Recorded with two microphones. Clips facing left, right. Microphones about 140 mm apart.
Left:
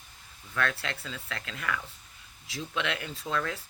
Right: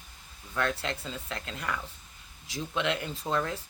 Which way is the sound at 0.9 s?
35° right (ahead or behind).